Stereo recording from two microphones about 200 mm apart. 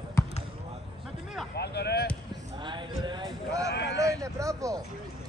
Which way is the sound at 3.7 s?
60° left (ahead or behind).